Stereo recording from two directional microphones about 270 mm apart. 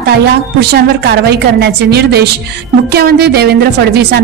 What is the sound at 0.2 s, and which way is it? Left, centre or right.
A woman's voice, right.